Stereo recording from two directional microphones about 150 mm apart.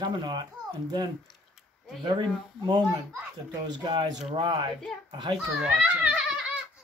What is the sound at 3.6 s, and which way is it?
Speech, 30° right (ahead or behind).